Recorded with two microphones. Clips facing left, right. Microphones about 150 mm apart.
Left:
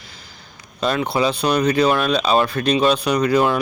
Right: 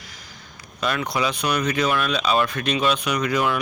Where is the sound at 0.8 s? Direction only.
30° left (ahead or behind).